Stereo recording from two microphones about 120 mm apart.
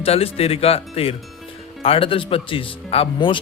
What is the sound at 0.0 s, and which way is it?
A man's voice, 55° left (ahead or behind).